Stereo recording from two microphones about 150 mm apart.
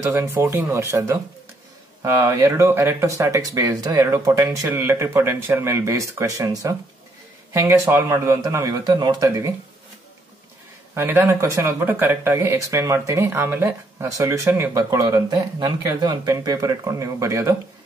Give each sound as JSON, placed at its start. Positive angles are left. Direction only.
{"t": 0.1, "sound": "speech", "side_deg": -15}
{"t": 11.0, "sound": "speech", "side_deg": -15}